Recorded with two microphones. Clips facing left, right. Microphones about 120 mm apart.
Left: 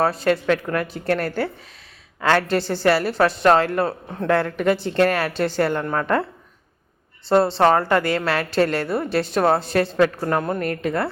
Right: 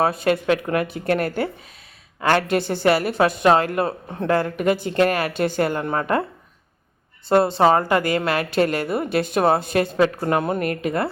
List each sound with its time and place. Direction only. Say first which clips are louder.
0.3 s a woman's voice: even; 10° right (ahead or behind)
7.3 s a woman's voice: even; 10° right (ahead or behind)